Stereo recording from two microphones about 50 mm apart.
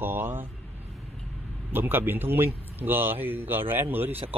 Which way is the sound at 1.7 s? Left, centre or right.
Right.